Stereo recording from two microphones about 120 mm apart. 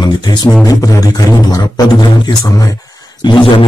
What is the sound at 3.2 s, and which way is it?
Speech, 40° left (ahead or behind).